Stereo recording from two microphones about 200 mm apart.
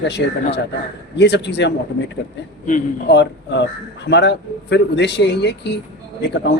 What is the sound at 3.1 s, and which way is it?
A man's voice, 60° left (ahead or behind).